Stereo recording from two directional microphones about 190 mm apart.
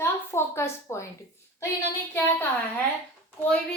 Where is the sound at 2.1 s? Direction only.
10° left (ahead or behind).